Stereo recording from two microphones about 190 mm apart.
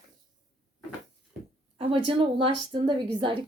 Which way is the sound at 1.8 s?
30° right (ahead or behind).